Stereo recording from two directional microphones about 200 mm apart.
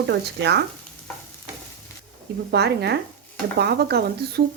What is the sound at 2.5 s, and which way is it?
Speech, 55° right (ahead or behind).